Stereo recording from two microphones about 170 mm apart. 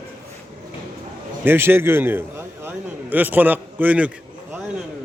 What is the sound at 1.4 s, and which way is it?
Speech, 15° right (ahead or behind).